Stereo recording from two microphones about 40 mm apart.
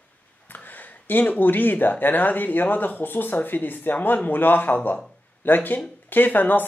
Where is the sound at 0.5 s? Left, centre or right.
Left.